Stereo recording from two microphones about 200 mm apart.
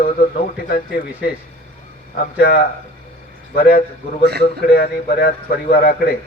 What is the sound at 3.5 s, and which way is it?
Speech, 50° left (ahead or behind).